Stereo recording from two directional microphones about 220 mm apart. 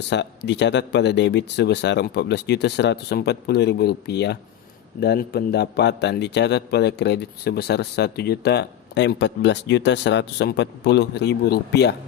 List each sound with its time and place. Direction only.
0.1 s a man's voice: 50° left (ahead or behind)